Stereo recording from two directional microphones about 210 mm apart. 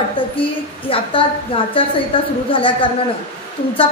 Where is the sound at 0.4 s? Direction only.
25° left (ahead or behind).